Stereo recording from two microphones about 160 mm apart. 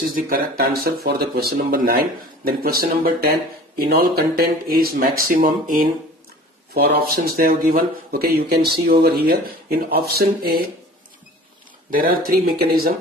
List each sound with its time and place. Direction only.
0.2 s speech: 65° right (ahead or behind)
6.7 s speech: 80° right
11.9 s speech: 65° right (ahead or behind)